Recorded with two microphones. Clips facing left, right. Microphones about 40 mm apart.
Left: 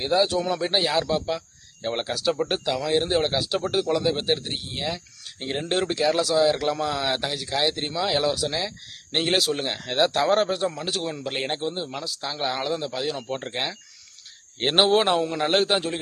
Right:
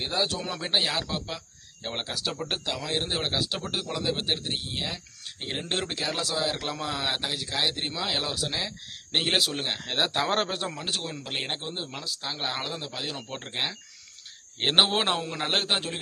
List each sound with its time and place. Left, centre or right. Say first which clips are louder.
0.0 s speech: left 7 dB; centre
10.2 s speech: left 6 dB; right
10.8 s speech: left 4 dB; centre
13.2 s speech: left 4 dB; centre
14.6 s speech: left 4 dB; centre